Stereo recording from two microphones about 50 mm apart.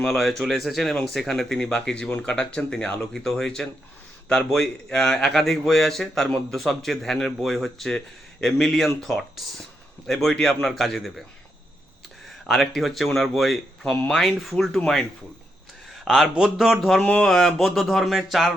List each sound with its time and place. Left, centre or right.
0.0 s speech: centre
1.5 s speech: left; by 11.1 s centre
12.5 s speech: centre
16.0 s speech: centre
17.0 s speech: left
17.2 s speech: centre